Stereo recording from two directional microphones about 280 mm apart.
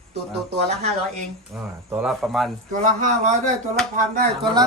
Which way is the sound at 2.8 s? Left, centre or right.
Right.